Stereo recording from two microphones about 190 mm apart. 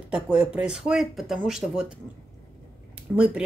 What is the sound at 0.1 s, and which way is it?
Speech, 5° right (ahead or behind).